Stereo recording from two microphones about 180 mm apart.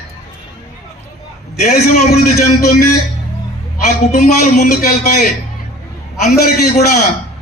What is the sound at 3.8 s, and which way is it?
A man's voice, 40° left (ahead or behind).